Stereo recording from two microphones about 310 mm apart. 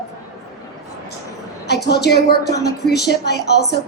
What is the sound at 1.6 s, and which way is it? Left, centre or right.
A woman's voice, left.